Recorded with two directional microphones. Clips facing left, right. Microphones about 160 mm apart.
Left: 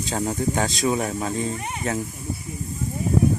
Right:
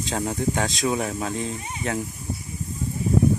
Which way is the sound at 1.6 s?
65° left (ahead or behind).